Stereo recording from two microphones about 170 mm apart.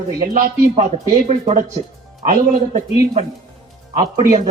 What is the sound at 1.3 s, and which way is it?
Speech, 40° right (ahead or behind).